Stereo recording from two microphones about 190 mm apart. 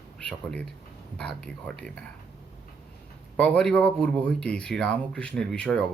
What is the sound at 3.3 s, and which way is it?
Speech, 5° left (ahead or behind).